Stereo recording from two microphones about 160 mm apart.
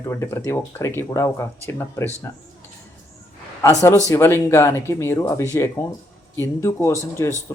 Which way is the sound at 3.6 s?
20° left (ahead or behind).